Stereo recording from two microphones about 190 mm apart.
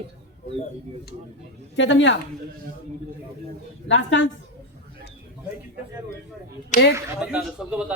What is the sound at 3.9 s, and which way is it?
Speech, 80° left.